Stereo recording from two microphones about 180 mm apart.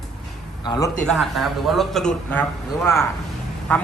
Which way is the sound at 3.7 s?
5° left (ahead or behind).